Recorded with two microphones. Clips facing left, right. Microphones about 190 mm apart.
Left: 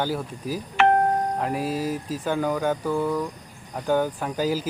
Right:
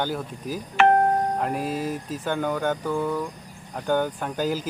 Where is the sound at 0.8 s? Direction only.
45° right (ahead or behind).